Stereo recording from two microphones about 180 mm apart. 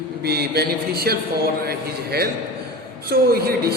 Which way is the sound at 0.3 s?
60° right (ahead or behind).